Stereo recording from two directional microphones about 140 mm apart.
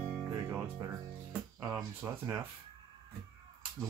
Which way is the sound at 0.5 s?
15° right (ahead or behind).